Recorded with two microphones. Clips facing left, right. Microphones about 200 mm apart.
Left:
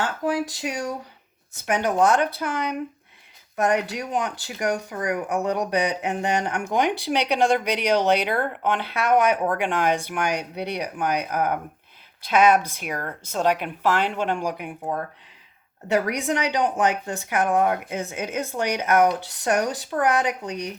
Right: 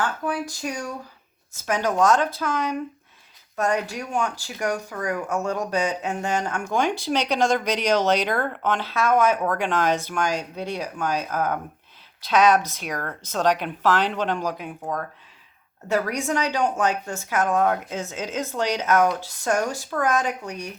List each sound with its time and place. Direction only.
0.6 s speech: 20° left (ahead or behind)
3.8 s speech: 70° left (ahead or behind)
4.1 s speech: 20° left (ahead or behind)
16.1 s speech: 15° left (ahead or behind)